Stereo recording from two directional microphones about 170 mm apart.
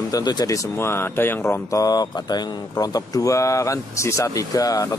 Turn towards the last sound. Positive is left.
turn(degrees=20)  # may be behind; listen again after turning